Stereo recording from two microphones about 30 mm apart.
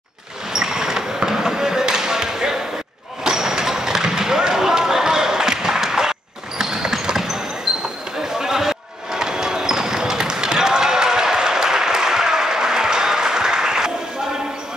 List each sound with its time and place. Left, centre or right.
0.5 s basketball bounce: centre
6.6 s a sound: centre
7.7 s basketball bounce: centre